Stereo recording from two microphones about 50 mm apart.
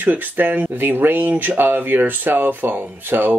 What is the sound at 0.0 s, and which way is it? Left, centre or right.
Speech, right.